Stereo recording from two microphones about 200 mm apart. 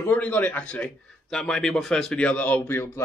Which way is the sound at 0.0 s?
10° left (ahead or behind).